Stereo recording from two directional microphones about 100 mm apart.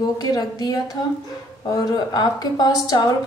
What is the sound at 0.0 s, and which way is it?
A woman's voice, 45° left (ahead or behind).